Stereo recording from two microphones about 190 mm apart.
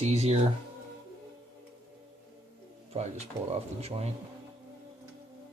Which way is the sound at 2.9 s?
35° right (ahead or behind).